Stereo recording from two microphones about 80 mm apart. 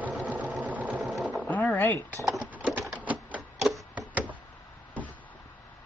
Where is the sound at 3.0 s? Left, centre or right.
Centre.